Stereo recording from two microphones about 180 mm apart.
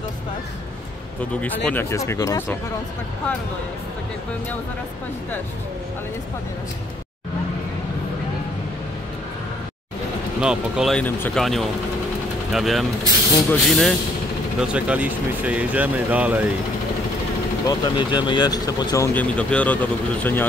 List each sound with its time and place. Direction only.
1.4 s speech: 10° left (ahead or behind)
10.4 s speech: 5° right (ahead or behind)
17.6 s speech: 25° left (ahead or behind)
19.2 s speech: 5° left (ahead or behind)